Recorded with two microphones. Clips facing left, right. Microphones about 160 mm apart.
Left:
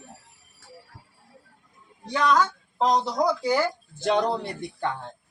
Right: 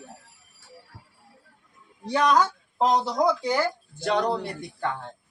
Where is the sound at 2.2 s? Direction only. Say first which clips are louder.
Even; 10° right (ahead or behind).